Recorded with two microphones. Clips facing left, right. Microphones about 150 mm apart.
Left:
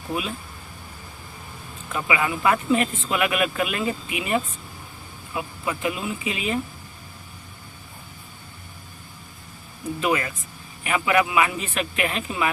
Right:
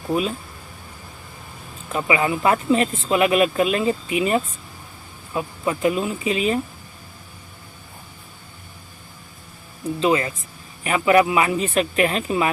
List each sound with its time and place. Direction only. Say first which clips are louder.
0.1 s speech: right 7 dB; 45° right (ahead or behind)
1.9 s speech: right 4 dB; 30° right (ahead or behind)
10.0 s speech: right 4 dB; 30° right (ahead or behind)